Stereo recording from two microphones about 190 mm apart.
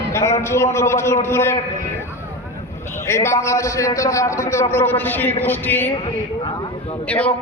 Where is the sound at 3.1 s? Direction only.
15° left (ahead or behind).